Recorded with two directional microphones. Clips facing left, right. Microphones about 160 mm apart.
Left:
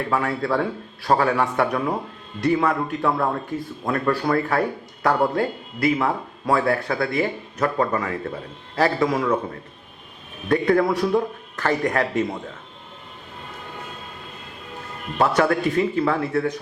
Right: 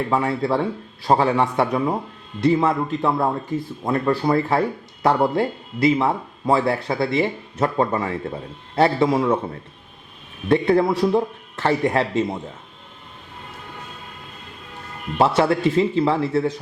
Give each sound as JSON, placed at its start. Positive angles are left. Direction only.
{"t": 0.1, "sound": "speech", "side_deg": -25}
{"t": 10.5, "sound": "speech", "side_deg": -25}
{"t": 15.2, "sound": "speech", "side_deg": -25}